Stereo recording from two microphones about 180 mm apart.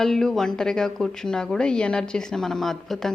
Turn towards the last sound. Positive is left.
turn(degrees=0)  # may be behind; listen again after turning